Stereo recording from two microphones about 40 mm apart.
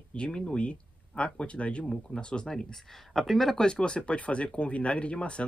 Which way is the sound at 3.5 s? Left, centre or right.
Left.